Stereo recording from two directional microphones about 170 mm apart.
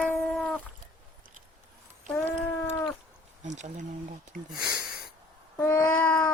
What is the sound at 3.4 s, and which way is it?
Speech, 45° right (ahead or behind).